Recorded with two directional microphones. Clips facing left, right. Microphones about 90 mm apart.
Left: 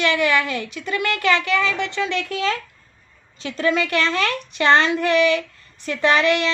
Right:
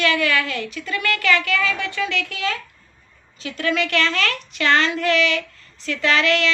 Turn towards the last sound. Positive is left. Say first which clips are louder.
# left 2 dB
turn(degrees=20)  # may be behind; listen again after turning